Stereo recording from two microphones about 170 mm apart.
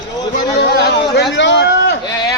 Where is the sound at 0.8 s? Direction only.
70° left (ahead or behind); by 2.0 s 90° left.